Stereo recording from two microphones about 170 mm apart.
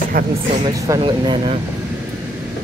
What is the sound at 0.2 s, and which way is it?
Speech, 60° right (ahead or behind).